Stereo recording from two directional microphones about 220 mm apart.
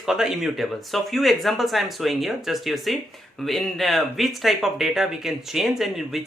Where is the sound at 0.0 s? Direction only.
Centre (ahead or behind).